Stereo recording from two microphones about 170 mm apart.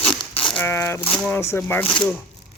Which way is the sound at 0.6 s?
15° left (ahead or behind).